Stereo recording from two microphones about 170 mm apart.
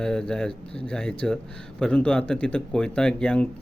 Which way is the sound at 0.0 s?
5° left (ahead or behind).